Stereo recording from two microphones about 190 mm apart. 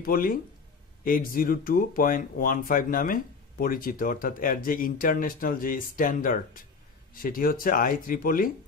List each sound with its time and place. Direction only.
0.0 s speech: 50° left (ahead or behind)